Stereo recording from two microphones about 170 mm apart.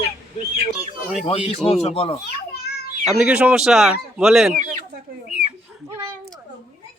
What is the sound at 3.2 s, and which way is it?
A man's voice, 5° right (ahead or behind).